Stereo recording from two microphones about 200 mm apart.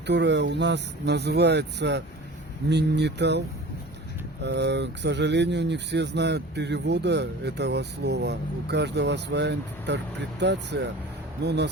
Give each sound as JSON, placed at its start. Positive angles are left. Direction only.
{"t": 0.1, "sound": "speech", "side_deg": -60}
{"t": 4.4, "sound": "speech", "side_deg": -60}